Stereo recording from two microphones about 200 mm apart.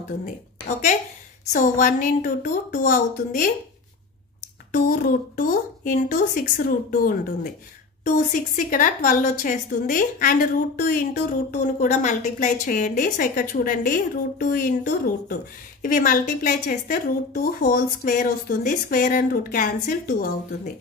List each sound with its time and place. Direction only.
0.2 s a woman's voice: 35° left (ahead or behind)
4.7 s a woman's voice: 45° left (ahead or behind)